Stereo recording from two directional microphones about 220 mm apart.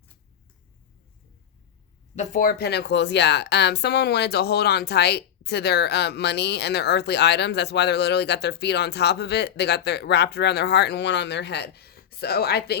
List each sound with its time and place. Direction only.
2.1 s a woman's voice: 35° left (ahead or behind)